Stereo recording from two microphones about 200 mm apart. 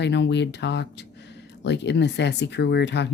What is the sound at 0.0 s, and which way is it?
Speech, 60° left (ahead or behind).